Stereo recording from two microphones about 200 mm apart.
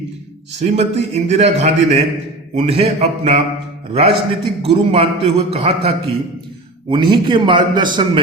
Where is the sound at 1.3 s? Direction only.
35° right (ahead or behind).